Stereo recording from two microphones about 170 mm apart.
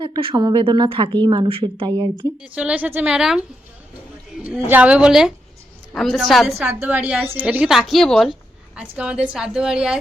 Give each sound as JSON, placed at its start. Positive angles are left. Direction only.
{"t": 0.0, "sound": "speech", "side_deg": -30}
{"t": 2.4, "sound": "a woman's voice", "side_deg": -5}
{"t": 4.7, "sound": "a woman's voice", "side_deg": -10}